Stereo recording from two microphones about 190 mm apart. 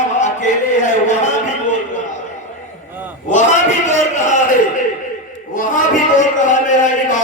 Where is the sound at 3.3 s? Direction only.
40° left (ahead or behind).